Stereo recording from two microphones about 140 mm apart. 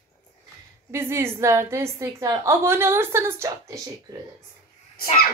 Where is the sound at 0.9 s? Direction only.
20° right (ahead or behind).